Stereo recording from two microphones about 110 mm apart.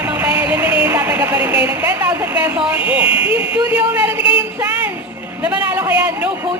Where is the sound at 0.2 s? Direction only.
10° right (ahead or behind).